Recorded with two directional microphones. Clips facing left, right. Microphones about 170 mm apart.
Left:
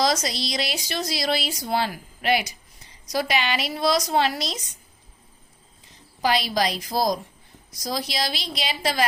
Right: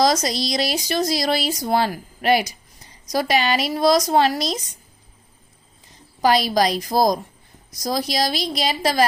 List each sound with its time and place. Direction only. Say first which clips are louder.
0.0 s speech: right 5 dB; 40° right (ahead or behind)
6.2 s a woman's voice: right 5 dB; 40° right (ahead or behind)